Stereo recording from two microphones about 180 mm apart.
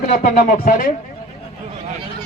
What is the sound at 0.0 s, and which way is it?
Speech, 45° left (ahead or behind).